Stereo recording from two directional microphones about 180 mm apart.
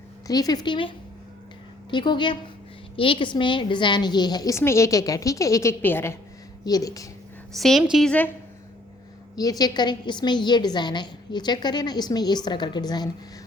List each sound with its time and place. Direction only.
0.3 s a woman's voice: 20° left (ahead or behind)
7.5 s a woman's voice: centre (ahead or behind)
9.3 s a woman's voice: 20° left (ahead or behind)